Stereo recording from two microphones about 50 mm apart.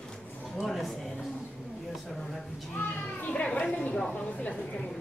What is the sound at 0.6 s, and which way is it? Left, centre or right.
Speech, centre.